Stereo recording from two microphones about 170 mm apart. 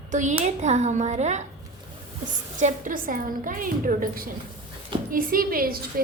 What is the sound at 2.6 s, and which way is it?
A woman's voice, 50° right (ahead or behind).